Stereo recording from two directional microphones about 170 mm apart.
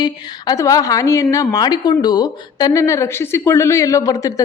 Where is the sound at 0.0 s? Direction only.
20° left (ahead or behind).